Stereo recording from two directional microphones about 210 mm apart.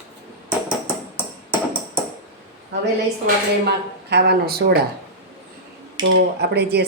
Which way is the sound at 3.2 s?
50° right (ahead or behind).